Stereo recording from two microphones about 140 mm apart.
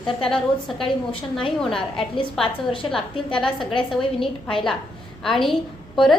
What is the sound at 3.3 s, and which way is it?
A woman's voice, 5° left (ahead or behind).